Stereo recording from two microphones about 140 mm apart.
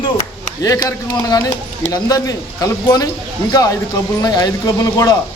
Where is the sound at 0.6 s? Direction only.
25° left (ahead or behind).